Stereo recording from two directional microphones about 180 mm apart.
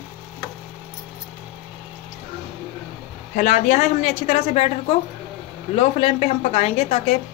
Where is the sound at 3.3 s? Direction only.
45° left (ahead or behind).